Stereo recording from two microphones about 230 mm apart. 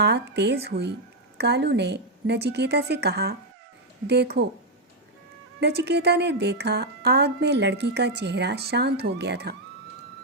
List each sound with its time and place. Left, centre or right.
0.0 s speech: right
5.5 s speech: right